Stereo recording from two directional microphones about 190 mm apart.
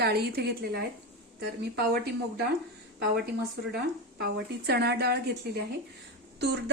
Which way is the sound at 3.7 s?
55° right (ahead or behind).